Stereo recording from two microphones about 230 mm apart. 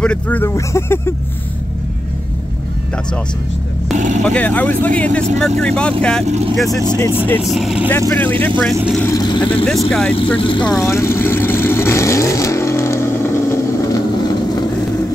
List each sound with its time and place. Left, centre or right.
0.0 s speech: centre
3.9 s speech: right
4.2 s speech: centre
8.7 s speech: centre
9.0 s speech: centre
9.7 s speech: centre
10.1 s speech: left
10.8 s vehicle: centre